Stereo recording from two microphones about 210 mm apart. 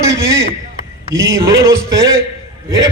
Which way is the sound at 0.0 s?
15° right (ahead or behind).